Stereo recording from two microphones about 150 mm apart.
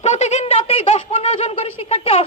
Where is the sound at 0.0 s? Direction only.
50° left (ahead or behind).